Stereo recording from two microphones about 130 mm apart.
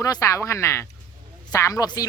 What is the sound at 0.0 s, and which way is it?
Speech, 25° left (ahead or behind).